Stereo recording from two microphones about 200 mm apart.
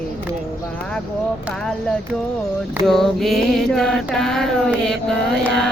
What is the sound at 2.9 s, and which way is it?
Mantra, centre (ahead or behind).